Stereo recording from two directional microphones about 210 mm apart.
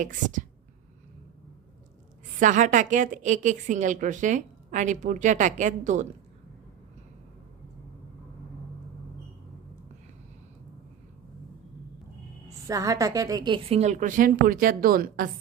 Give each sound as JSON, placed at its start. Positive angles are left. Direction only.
{"t": 0.0, "sound": "a woman's voice", "side_deg": -35}
{"t": 2.4, "sound": "a woman's voice", "side_deg": -35}
{"t": 12.6, "sound": "a woman's voice", "side_deg": -15}